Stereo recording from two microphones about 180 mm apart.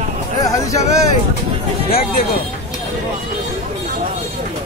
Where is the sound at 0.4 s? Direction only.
20° left (ahead or behind).